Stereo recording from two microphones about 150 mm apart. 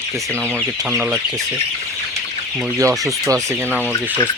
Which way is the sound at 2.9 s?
Centre (ahead or behind).